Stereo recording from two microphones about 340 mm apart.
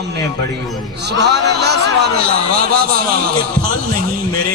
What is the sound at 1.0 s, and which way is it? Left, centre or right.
A man's voice, right.